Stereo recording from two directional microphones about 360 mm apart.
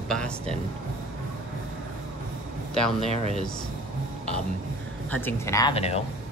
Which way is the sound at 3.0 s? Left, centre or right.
Centre.